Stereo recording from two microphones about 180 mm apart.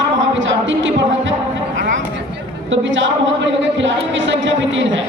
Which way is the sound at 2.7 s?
90° right.